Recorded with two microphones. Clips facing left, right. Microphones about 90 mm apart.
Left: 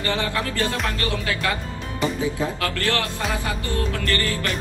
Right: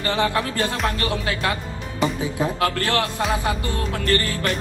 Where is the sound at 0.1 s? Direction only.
25° right (ahead or behind).